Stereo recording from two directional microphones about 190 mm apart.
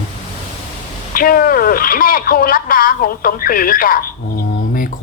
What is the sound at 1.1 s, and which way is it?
Speech, 50° left (ahead or behind).